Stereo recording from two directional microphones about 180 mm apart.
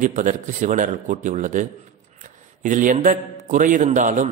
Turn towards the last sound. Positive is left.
turn(degrees=-45)  # may be behind; listen again after turning